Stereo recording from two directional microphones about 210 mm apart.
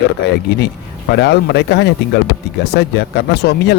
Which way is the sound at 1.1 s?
55° left (ahead or behind).